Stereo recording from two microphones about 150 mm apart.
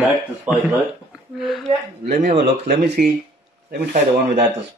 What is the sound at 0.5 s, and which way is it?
Speech, 5° right (ahead or behind).